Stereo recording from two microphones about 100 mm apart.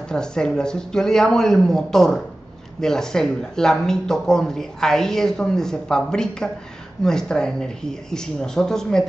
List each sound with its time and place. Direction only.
0.1 s speech: 5° left (ahead or behind)